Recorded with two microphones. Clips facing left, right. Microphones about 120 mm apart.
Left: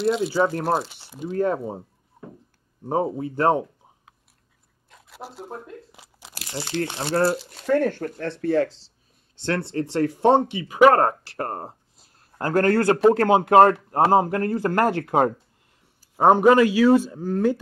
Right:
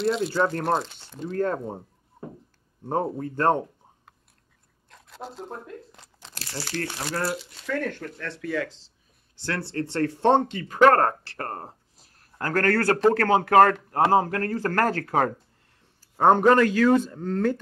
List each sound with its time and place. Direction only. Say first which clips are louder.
0.0 s speech: left 2 dB; centre (ahead or behind); by 7.4 s 30° left (ahead or behind)
7.4 s speech: left 8 dB; 45° left (ahead or behind)
9.4 s speech: left 4 dB; 20° left (ahead or behind)
16.0 s speech: left 2 dB; 10° left (ahead or behind)